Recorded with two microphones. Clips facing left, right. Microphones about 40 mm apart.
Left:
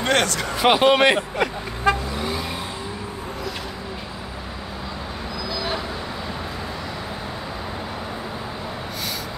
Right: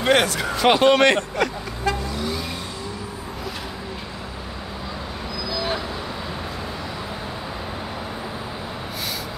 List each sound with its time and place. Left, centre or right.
0.0 s speech: centre
0.6 s a man's voice: centre
2.1 s vehicle: centre
5.5 s vehicle: centre